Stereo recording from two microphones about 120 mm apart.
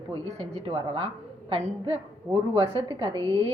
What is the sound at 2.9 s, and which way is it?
Speech, 45° right (ahead or behind).